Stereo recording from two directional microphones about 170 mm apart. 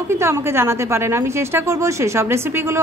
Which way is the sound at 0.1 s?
15° right (ahead or behind).